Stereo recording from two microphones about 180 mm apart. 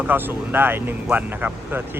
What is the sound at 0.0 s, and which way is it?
Speech, 10° right (ahead or behind).